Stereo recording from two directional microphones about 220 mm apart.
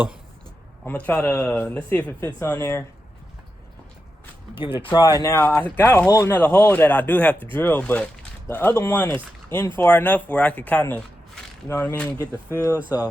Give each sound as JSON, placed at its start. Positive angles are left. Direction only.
{"t": 0.9, "sound": "speech", "side_deg": 5}
{"t": 4.8, "sound": "speech", "side_deg": 20}